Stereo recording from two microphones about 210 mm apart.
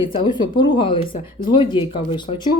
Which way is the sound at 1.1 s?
40° left (ahead or behind).